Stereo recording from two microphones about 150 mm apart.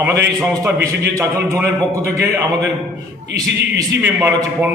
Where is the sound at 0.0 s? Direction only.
15° right (ahead or behind).